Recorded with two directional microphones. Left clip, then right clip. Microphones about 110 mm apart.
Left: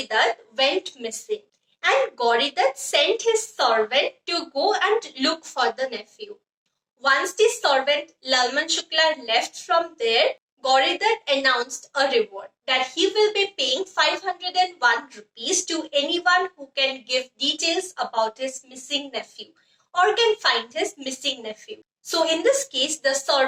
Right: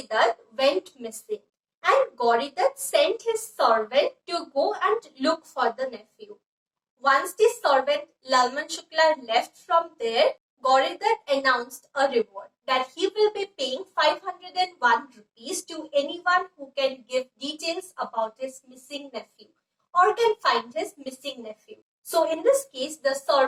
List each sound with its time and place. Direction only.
0.0 s a woman's voice: 25° left (ahead or behind)